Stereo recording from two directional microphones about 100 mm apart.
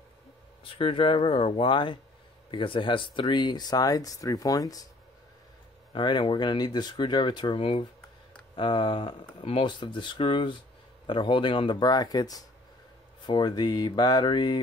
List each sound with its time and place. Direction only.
0.7 s speech: 60° left (ahead or behind); by 4.8 s 40° left (ahead or behind)
5.9 s speech: 55° left (ahead or behind)
7.5 s speech: 60° left (ahead or behind)
8.5 s speech: 50° left (ahead or behind)
9.4 s speech: 60° left (ahead or behind)